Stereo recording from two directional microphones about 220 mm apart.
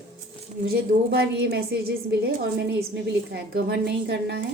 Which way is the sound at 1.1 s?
45° right (ahead or behind).